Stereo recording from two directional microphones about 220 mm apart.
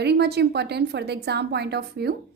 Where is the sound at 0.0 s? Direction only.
50° right (ahead or behind).